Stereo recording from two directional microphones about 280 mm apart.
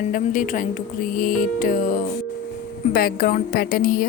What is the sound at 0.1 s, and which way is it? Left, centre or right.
A woman's voice, left.